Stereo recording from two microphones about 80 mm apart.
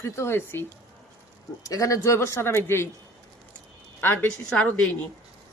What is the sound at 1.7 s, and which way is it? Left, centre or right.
Speech, left.